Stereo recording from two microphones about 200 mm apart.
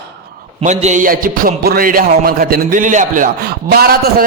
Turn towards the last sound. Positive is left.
turn(degrees=-50)  # may be behind; listen again after turning